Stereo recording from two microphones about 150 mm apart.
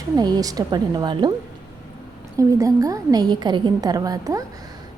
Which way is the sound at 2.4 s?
20° right (ahead or behind).